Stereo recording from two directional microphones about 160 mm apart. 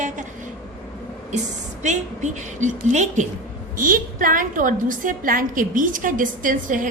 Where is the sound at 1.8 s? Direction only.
50° right (ahead or behind).